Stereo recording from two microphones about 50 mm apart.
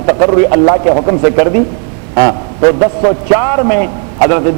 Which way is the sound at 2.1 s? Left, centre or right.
Left.